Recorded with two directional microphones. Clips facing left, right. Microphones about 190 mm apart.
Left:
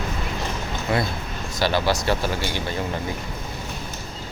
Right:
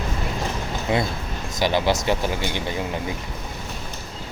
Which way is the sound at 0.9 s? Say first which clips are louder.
Right 1 dB; 20° right (ahead or behind).